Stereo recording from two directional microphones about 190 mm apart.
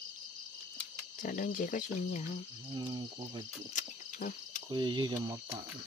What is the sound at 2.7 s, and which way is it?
Cricket, 25° right (ahead or behind).